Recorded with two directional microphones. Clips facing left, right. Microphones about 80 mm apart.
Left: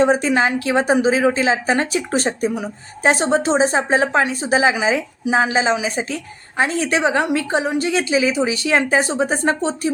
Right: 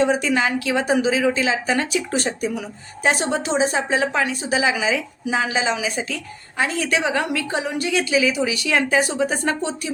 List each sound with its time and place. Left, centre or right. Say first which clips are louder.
0.0 s a woman's voice: left 3 dB; left